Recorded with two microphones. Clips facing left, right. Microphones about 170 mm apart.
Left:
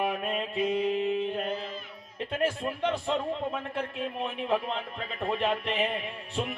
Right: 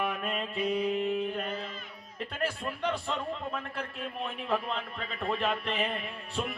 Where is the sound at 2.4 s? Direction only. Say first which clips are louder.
Left 4 dB; 25° left (ahead or behind).